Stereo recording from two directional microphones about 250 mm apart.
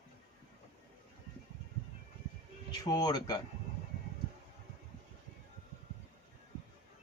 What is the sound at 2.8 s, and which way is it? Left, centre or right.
Speech, centre.